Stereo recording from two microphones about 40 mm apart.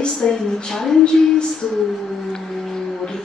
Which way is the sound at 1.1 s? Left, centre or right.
Centre.